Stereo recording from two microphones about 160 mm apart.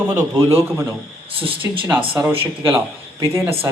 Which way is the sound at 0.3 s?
20° right (ahead or behind).